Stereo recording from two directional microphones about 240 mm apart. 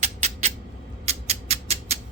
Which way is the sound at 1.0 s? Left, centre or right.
Right.